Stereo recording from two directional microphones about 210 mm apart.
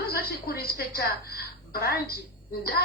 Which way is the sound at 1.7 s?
45° left (ahead or behind).